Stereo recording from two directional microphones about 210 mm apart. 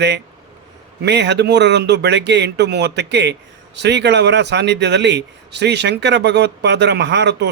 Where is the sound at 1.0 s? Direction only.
55° right (ahead or behind).